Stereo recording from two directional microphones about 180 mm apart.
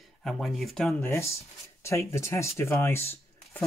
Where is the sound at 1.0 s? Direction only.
15° left (ahead or behind).